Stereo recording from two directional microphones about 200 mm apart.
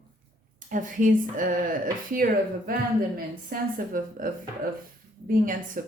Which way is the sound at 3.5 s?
45° right (ahead or behind).